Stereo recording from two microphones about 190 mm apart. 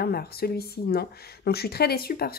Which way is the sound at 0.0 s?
55° left (ahead or behind).